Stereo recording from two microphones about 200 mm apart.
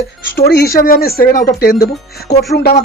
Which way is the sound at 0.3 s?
55° left (ahead or behind).